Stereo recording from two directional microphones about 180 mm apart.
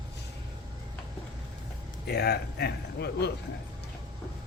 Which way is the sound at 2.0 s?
65° left (ahead or behind).